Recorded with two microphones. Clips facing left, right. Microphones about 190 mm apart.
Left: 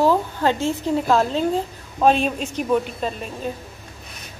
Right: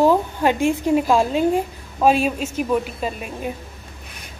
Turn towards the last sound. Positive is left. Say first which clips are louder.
# even
turn(degrees=-10)  # may be behind; listen again after turning